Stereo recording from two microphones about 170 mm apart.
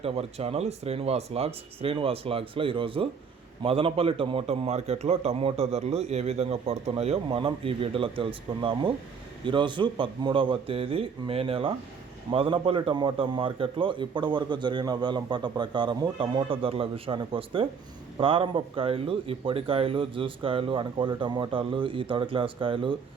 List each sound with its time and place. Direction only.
0.0 s a man's voice: 35° right (ahead or behind)